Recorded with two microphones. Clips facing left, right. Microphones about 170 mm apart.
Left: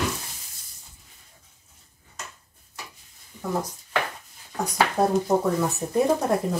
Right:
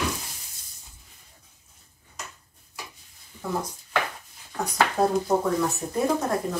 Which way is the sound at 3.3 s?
15° left (ahead or behind).